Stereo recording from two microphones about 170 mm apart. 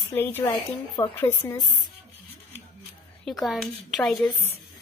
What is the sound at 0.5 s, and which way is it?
Speech, 25° left (ahead or behind).